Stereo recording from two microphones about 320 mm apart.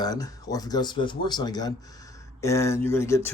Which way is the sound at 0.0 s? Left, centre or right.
Centre.